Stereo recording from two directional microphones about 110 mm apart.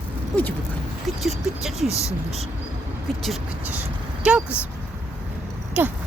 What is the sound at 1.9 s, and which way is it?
Speech, 25° left (ahead or behind).